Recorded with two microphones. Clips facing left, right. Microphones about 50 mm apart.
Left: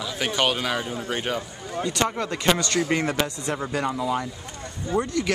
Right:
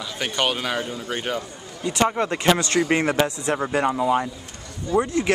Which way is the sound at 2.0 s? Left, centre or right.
Right.